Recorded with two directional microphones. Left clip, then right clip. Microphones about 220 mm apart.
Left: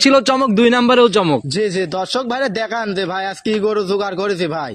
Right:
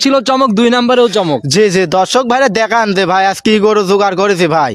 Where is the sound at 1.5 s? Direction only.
50° right (ahead or behind).